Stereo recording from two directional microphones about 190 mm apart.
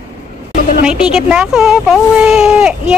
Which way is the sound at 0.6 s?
45° left (ahead or behind).